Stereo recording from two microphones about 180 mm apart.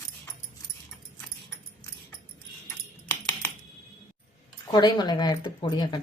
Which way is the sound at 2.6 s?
15° left (ahead or behind).